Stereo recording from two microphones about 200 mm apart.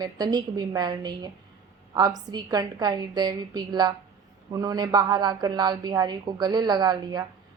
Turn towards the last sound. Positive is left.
turn(degrees=-20)  # may be behind; listen again after turning